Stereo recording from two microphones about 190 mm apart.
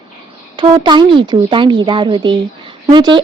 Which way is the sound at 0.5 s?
25° right (ahead or behind).